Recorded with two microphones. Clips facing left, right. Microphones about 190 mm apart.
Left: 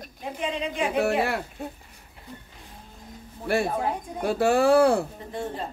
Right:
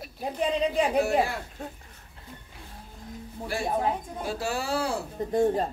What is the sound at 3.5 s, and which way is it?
Speech, 60° left (ahead or behind).